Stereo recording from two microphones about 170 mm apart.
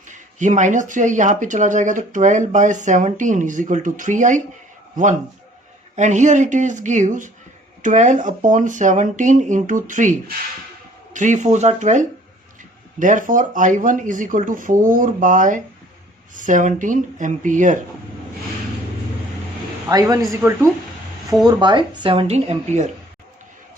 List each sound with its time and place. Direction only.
0.1 s speech: 45° right (ahead or behind)
6.0 s speech: 45° right (ahead or behind)
19.9 s speech: 20° right (ahead or behind)
21.4 s speech: 25° right (ahead or behind)